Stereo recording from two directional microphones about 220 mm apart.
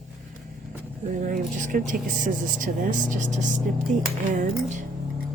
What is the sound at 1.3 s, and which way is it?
A woman's voice, 35° right (ahead or behind).